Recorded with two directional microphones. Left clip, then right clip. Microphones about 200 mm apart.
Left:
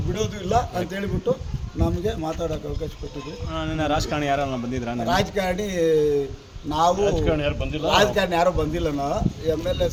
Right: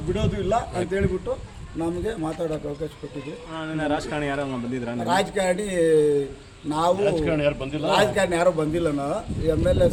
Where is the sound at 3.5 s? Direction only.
55° left (ahead or behind).